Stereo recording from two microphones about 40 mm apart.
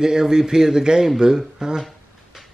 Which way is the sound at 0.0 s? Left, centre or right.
Centre.